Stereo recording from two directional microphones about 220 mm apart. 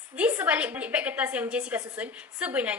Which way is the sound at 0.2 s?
5° right (ahead or behind).